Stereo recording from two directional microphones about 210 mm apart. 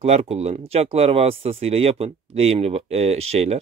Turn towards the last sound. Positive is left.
turn(degrees=-30)  # may be behind; listen again after turning